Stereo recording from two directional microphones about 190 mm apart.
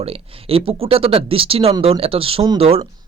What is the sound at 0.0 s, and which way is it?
Speech, 30° right (ahead or behind).